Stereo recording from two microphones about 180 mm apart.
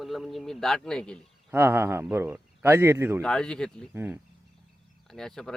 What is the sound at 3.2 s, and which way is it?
Speech, 5° left (ahead or behind).